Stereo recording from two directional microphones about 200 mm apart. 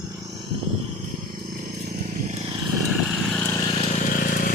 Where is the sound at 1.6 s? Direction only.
40° right (ahead or behind).